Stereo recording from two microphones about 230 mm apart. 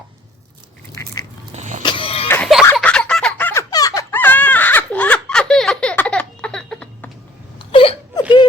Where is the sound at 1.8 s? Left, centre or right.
Left.